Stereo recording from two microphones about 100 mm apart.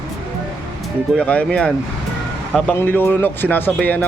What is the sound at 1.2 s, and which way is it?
Speech, 15° left (ahead or behind).